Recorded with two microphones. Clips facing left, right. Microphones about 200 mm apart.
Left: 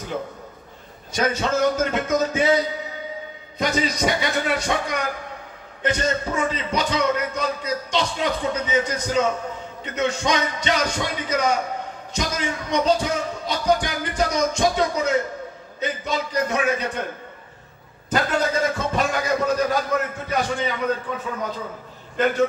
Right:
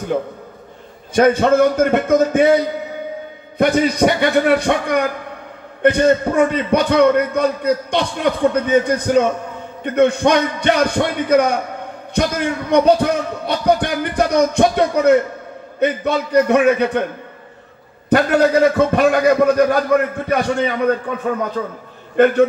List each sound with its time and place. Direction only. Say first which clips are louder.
1.1 s a man's voice: right 10 dB; 55° right (ahead or behind)
18.1 s a man's voice: right 9 dB; 65° right (ahead or behind)